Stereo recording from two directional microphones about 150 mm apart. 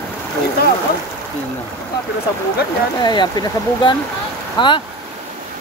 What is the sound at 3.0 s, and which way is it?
Speech, 25° left (ahead or behind).